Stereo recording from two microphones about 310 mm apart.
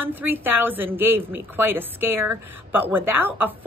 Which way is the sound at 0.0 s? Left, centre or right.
Centre.